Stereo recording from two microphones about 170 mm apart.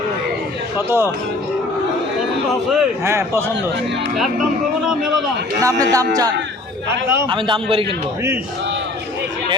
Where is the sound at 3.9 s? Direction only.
90° right.